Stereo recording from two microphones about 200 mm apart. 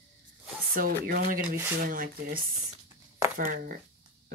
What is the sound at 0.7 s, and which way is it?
Speech, 45° right (ahead or behind).